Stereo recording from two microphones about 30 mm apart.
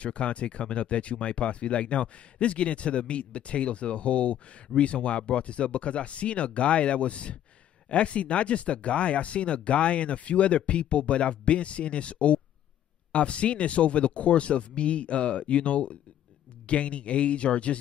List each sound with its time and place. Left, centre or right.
0.0 s speech: left